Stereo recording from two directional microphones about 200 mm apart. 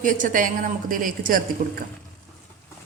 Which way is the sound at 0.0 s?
40° right (ahead or behind).